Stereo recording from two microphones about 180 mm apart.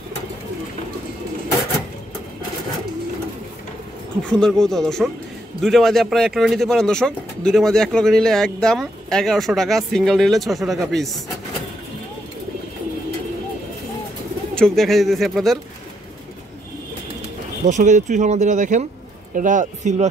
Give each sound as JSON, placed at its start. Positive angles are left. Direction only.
{"t": 4.2, "sound": "speech", "side_deg": 5}
{"t": 14.5, "sound": "speech", "side_deg": 5}
{"t": 17.6, "sound": "speech", "side_deg": -40}